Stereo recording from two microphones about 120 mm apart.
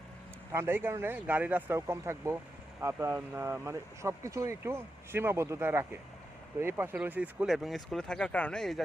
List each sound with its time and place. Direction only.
0.5 s speech: 20° right (ahead or behind); by 8.8 s 5° left (ahead or behind)